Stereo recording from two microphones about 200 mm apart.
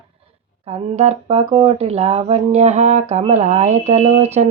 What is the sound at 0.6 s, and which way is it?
Speech, 30° right (ahead or behind).